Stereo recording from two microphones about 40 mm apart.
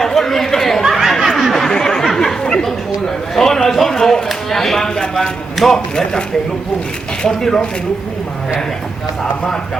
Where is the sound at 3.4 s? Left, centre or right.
Centre.